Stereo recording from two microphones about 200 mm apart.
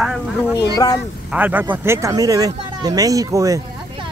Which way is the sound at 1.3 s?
10° right (ahead or behind).